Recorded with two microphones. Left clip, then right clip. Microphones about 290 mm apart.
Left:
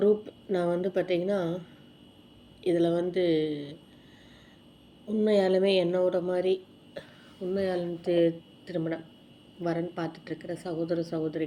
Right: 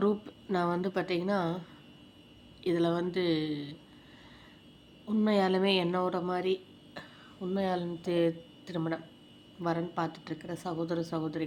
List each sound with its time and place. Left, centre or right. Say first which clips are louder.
0.0 s speech: left 6 dB; centre
2.6 s speech: left 4 dB; centre
5.0 s speech: left 4 dB; centre